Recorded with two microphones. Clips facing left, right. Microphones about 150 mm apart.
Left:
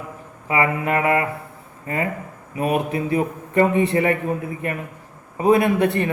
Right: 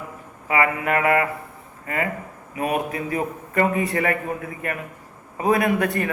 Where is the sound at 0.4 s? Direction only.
25° left (ahead or behind).